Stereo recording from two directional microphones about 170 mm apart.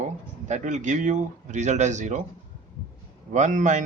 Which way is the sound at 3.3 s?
45° right (ahead or behind).